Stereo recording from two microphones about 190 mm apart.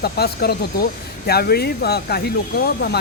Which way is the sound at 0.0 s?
55° left (ahead or behind).